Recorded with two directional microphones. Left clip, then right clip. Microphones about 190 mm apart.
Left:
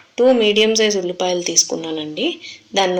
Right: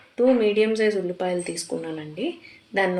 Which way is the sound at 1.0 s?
40° left (ahead or behind).